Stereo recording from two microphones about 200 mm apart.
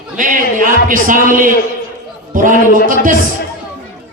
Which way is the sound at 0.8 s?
40° right (ahead or behind).